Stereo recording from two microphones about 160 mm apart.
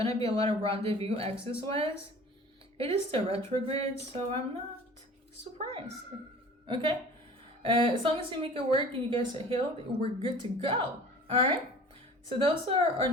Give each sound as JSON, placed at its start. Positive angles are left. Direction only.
{"t": 0.0, "sound": "speech", "side_deg": -35}
{"t": 7.6, "sound": "speech", "side_deg": -30}